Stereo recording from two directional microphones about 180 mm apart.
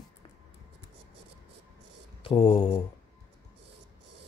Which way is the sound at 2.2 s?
30° left (ahead or behind).